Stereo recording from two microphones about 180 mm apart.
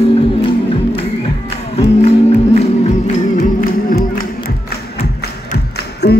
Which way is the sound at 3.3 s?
50° left (ahead or behind).